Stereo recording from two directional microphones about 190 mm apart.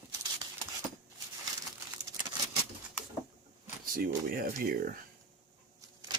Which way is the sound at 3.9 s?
50° right (ahead or behind).